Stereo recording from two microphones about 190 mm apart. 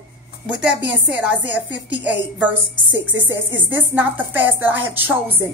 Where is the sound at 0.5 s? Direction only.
5° right (ahead or behind).